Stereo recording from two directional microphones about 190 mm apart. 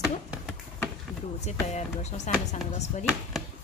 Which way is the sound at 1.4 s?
35° left (ahead or behind).